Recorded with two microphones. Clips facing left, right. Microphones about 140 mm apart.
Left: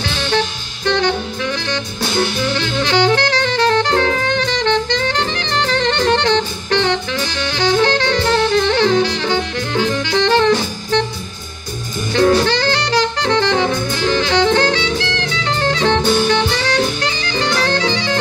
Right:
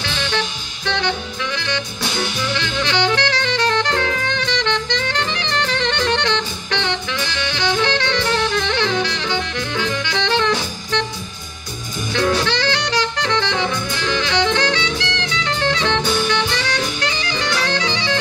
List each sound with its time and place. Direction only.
0.0 s music: 45° left (ahead or behind)
12.1 s saxophone: 45° left (ahead or behind)